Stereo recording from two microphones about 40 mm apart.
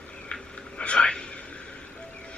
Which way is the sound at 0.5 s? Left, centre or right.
Left.